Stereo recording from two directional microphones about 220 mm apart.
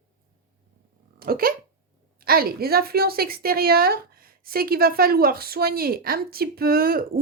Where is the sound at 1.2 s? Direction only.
40° right (ahead or behind).